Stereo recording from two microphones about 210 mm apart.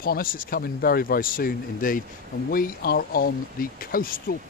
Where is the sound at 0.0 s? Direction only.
45° left (ahead or behind).